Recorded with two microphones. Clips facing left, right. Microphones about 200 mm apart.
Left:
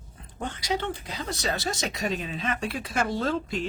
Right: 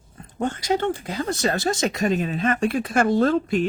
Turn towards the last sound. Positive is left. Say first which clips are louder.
# right 8 dB
turn(degrees=-55)  # may be behind; listen again after turning